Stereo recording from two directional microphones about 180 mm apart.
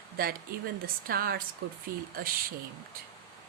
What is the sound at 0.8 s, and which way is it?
A woman's voice, 55° right (ahead or behind).